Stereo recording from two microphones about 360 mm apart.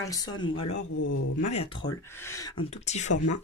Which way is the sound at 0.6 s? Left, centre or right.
Left.